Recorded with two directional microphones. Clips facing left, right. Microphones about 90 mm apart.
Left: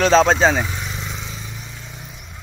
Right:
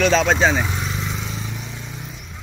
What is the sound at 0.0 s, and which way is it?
Speech, 35° left (ahead or behind).